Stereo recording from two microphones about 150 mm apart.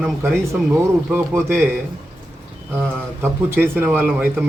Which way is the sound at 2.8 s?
15° right (ahead or behind).